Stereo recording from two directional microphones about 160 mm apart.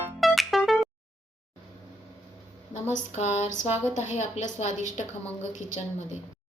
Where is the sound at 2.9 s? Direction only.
45° left (ahead or behind).